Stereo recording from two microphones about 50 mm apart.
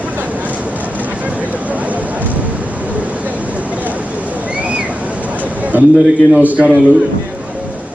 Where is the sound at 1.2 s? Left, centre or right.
Right.